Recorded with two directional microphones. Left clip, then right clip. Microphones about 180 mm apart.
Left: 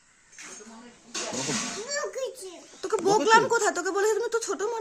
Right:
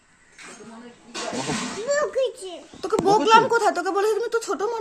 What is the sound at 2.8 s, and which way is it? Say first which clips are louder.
Speech: right 4 dB; 10° left (ahead or behind).